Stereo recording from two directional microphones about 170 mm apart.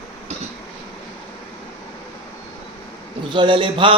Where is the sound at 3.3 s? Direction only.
30° right (ahead or behind).